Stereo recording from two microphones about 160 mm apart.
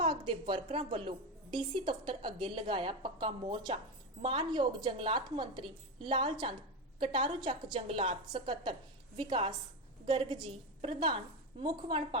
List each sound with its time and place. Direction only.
0.0 s a woman's voice: 30° right (ahead or behind)